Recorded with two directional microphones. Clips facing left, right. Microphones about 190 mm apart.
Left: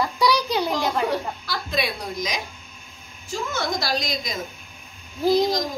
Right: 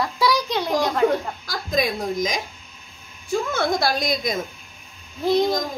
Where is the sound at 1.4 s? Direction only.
45° right (ahead or behind).